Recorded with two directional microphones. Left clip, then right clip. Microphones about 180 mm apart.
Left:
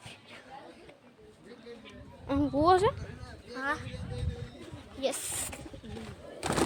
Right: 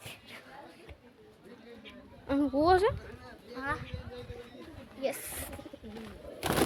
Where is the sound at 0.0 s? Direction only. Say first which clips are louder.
Right 1 dB; 40° right (ahead or behind).